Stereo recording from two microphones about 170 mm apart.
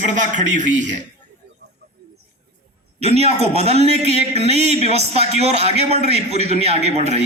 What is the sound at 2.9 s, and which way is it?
A man's voice, 40° right (ahead or behind).